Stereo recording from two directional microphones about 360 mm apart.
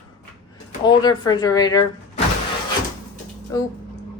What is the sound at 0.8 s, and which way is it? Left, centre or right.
Speech, centre.